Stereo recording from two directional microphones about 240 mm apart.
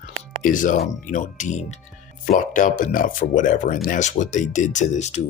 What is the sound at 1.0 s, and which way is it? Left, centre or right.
Speech, left.